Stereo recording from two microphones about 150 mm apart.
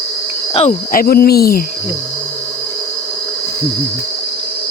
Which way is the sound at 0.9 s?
90° left.